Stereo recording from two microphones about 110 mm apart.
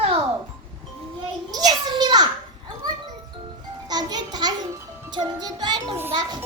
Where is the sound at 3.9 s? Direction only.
40° right (ahead or behind).